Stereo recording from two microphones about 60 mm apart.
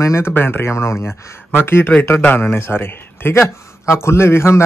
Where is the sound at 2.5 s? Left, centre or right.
Left.